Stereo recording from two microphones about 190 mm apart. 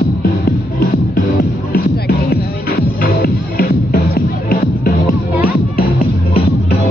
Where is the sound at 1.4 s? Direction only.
55° left (ahead or behind).